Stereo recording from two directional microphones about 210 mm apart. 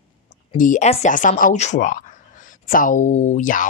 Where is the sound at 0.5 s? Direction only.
35° left (ahead or behind).